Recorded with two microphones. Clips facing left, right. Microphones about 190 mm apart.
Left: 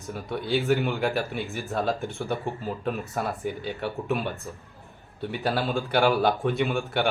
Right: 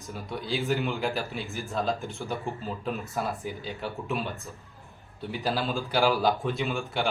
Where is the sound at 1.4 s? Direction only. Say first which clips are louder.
Left 2 dB; centre (ahead or behind).